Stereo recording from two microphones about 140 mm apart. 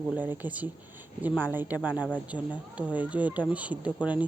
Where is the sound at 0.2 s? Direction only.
10° right (ahead or behind).